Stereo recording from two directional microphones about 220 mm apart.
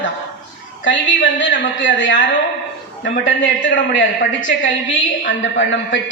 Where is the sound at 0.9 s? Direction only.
55° left (ahead or behind).